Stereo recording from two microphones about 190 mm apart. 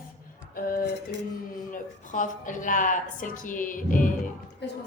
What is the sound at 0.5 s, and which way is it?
Music, 50° left (ahead or behind).